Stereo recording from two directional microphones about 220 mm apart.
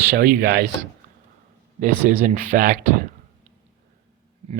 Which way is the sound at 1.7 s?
35° right (ahead or behind).